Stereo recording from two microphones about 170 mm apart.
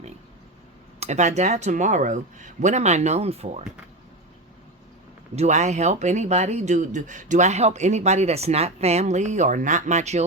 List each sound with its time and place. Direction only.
0.9 s speech: 40° right (ahead or behind)
5.4 s speech: 45° right (ahead or behind)